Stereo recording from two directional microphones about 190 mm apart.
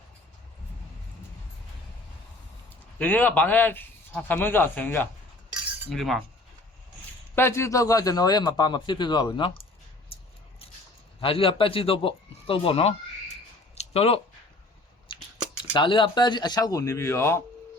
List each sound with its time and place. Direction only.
3.0 s speech: 10° left (ahead or behind)
5.9 s cutlery: centre (ahead or behind)
7.3 s a man's voice: 15° left (ahead or behind)
10.1 s a sound: 30° left (ahead or behind)
11.2 s speech: 30° left (ahead or behind)
13.7 s a sound: 30° left (ahead or behind)
15.7 s a man's voice: 25° left (ahead or behind)